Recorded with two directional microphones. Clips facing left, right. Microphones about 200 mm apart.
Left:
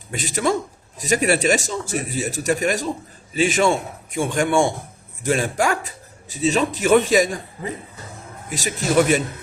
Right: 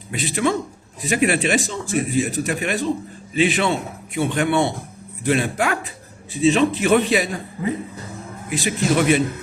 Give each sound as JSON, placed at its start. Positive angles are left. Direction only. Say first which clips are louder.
{"t": 0.1, "sound": "a man's voice", "louder": "right 1 dB", "side_deg": 45}